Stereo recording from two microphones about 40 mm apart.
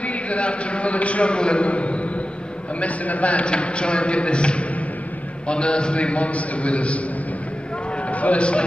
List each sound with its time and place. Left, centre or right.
0.0 s a man's voice: left
8.1 s a man's voice: left